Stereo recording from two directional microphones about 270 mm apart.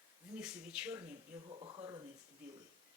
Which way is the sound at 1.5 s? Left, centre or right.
Centre.